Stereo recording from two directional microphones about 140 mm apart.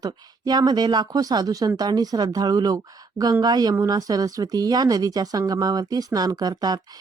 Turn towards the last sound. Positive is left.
turn(degrees=-30)  # may be behind; listen again after turning